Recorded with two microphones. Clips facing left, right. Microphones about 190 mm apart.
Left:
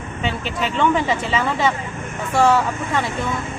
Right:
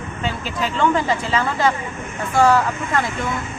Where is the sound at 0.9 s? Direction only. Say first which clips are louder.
Even; 5° left (ahead or behind).